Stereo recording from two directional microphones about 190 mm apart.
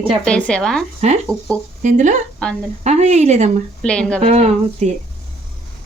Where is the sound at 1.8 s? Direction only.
40° right (ahead or behind).